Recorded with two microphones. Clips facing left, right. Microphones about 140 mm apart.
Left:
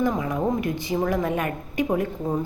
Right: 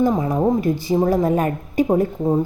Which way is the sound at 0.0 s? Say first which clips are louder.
Right 6 dB; 35° right (ahead or behind).